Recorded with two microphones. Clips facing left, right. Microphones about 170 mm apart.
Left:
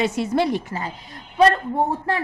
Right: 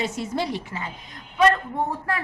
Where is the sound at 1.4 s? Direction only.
30° left (ahead or behind).